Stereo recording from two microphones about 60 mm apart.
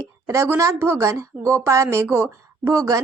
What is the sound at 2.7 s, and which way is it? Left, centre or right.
Speech, right.